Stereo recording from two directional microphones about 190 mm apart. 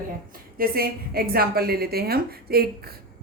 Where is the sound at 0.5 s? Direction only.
50° right (ahead or behind).